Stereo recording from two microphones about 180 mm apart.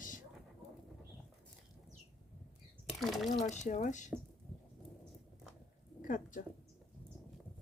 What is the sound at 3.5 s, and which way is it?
Speech, 40° left (ahead or behind).